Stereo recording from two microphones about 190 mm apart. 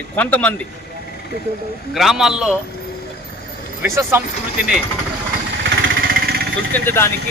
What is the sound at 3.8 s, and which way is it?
Speech, 10° right (ahead or behind).